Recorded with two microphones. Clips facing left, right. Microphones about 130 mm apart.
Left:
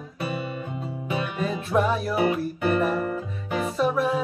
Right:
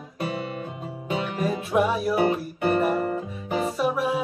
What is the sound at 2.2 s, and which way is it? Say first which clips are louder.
Music: even; 35° right (ahead or behind).